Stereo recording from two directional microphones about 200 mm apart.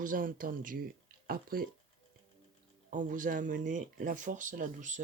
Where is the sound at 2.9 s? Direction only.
40° right (ahead or behind).